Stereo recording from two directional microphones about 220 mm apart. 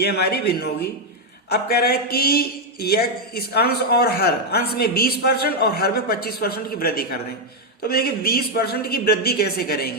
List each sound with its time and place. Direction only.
0.0 s speech: 45° left (ahead or behind)